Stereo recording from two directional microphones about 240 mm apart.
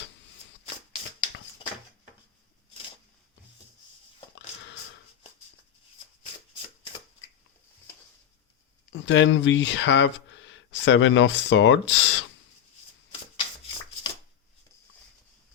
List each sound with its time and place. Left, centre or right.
8.9 s speech: left